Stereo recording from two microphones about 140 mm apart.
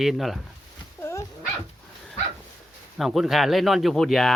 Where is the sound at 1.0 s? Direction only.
20° left (ahead or behind).